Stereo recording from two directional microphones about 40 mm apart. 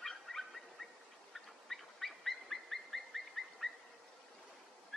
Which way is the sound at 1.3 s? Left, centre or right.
Centre.